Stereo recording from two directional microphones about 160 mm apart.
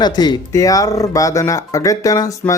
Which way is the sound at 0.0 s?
25° left (ahead or behind).